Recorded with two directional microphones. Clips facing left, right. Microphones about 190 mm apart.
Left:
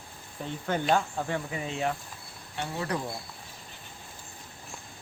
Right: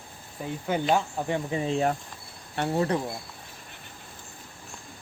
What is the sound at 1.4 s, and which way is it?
Speech, 30° right (ahead or behind).